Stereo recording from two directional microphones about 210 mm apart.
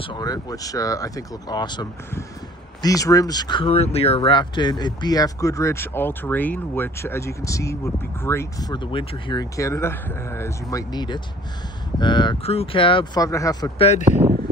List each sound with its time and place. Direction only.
0.0 s speech: 20° left (ahead or behind)